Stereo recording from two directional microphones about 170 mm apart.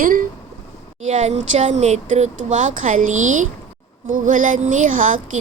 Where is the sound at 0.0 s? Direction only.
55° right (ahead or behind).